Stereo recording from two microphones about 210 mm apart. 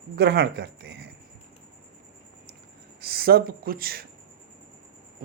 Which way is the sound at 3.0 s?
45° right (ahead or behind).